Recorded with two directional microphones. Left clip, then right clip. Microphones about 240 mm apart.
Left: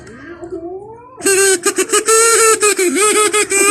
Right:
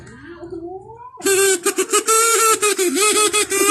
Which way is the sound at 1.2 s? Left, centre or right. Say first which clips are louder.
Left 4 dB; centre.